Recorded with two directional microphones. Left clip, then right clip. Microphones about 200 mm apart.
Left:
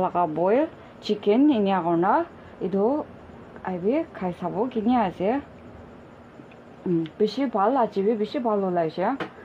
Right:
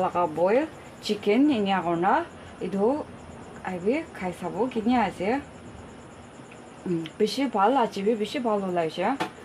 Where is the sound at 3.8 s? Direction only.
35° left (ahead or behind).